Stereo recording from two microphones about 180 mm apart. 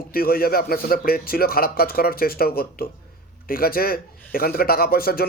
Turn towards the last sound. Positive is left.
turn(degrees=60)  # may be behind; listen again after turning